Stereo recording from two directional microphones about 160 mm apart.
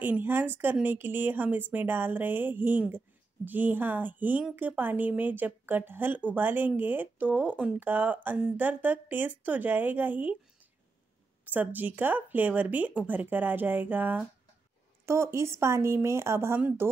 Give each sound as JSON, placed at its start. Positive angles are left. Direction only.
{"t": 0.0, "sound": "a woman's voice", "side_deg": -10}
{"t": 11.4, "sound": "a woman's voice", "side_deg": -10}